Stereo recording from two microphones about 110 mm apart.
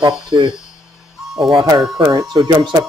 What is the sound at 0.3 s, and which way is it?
Speech, 45° right (ahead or behind).